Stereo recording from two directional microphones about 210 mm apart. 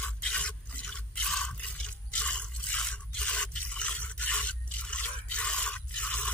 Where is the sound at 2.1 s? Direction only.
5° left (ahead or behind).